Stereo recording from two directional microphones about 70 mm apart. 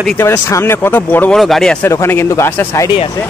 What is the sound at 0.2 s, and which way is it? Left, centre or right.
Speech, left.